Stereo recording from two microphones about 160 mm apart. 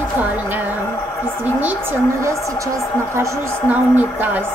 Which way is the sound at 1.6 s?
10° right (ahead or behind).